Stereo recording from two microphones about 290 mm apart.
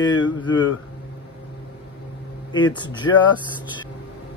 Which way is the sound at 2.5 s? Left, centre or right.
Centre.